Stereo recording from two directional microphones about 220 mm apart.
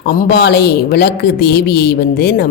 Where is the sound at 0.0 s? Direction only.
45° left (ahead or behind).